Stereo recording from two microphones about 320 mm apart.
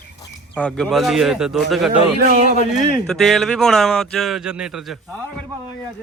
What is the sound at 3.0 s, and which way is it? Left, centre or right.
Speech, centre.